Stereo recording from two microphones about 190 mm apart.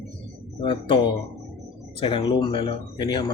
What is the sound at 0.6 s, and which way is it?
Speech, 25° left (ahead or behind).